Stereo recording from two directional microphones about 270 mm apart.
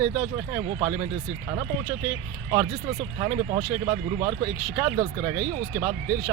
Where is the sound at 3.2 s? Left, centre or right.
Centre.